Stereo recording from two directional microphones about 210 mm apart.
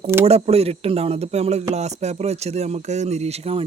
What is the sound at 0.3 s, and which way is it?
Speech, 30° right (ahead or behind).